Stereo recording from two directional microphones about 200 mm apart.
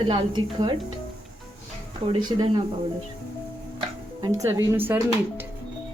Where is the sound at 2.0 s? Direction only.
20° right (ahead or behind).